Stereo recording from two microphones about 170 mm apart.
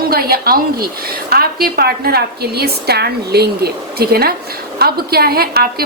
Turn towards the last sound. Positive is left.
turn(degrees=-65)  # may be behind; listen again after turning